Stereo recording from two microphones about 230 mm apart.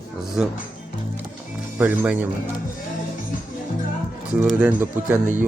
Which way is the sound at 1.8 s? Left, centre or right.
Centre.